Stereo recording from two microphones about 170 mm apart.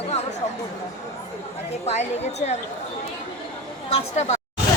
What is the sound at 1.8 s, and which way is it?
Speech, 40° left (ahead or behind).